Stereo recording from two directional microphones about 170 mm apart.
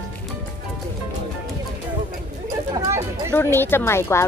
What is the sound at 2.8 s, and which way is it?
Speech, 15° right (ahead or behind).